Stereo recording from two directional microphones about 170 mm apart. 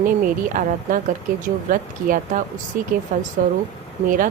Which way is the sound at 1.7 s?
50° right (ahead or behind).